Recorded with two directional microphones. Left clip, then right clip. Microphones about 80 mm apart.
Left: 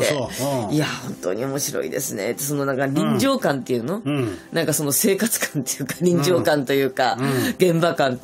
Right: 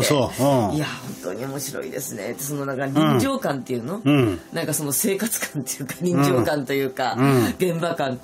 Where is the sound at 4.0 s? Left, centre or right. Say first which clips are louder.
Right 5 dB; right.